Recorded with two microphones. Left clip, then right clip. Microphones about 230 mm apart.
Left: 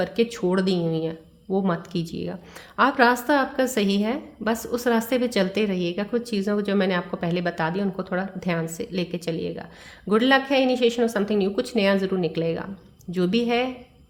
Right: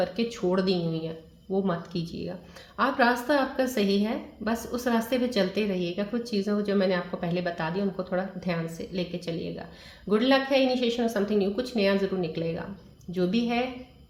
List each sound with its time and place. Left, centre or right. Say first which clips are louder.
0.0 s a woman's voice: left 4 dB; left